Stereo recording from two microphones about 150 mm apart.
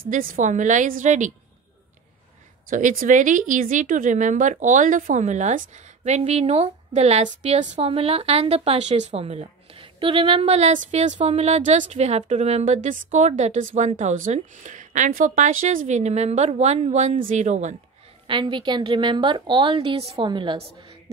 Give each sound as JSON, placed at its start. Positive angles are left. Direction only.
{"t": 0.1, "sound": "a woman's voice", "side_deg": -65}
{"t": 2.7, "sound": "speech", "side_deg": -65}
{"t": 18.2, "sound": "a woman's voice", "side_deg": -35}